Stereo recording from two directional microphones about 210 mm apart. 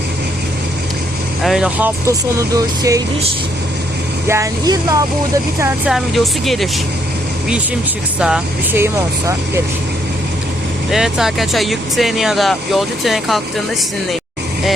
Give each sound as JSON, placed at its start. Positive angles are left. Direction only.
{"t": 1.5, "sound": "speech", "side_deg": -5}
{"t": 4.3, "sound": "speech", "side_deg": -15}
{"t": 5.9, "sound": "speech", "side_deg": 0}
{"t": 8.2, "sound": "speech", "side_deg": -5}
{"t": 10.9, "sound": "speech", "side_deg": 0}